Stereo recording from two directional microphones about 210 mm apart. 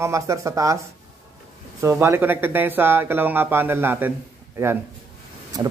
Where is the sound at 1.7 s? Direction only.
10° right (ahead or behind).